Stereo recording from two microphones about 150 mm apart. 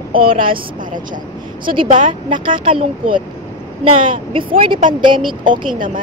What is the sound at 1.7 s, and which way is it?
Speech, 35° right (ahead or behind).